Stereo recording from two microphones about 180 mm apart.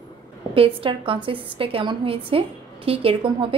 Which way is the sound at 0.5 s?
30° right (ahead or behind).